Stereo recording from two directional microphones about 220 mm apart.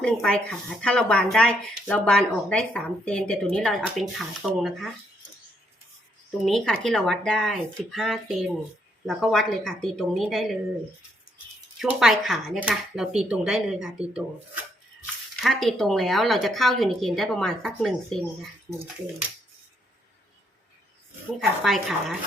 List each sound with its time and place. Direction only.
0.0 s a woman's voice: 5° left (ahead or behind)
6.4 s a woman's voice: centre (ahead or behind)
11.9 s a woman's voice: centre (ahead or behind)
15.4 s a woman's voice: centre (ahead or behind)
21.6 s a woman's voice: centre (ahead or behind)